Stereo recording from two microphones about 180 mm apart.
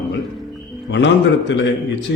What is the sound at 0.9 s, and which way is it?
Speech, 90° left.